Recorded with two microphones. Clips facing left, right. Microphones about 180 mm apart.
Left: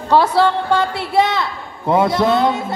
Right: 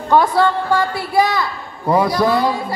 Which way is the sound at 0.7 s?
25° left (ahead or behind).